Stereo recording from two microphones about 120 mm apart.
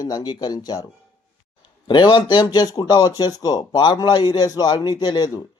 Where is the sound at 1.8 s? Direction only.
40° left (ahead or behind).